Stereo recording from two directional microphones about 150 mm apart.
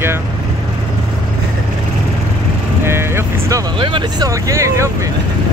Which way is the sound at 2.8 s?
15° right (ahead or behind).